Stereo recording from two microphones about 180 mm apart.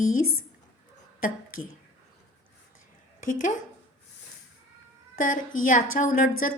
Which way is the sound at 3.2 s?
45° left (ahead or behind).